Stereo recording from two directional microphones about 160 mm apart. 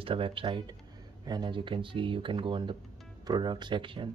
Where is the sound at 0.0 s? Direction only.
35° right (ahead or behind).